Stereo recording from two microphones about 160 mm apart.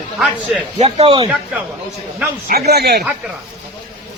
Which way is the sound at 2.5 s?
75° right (ahead or behind).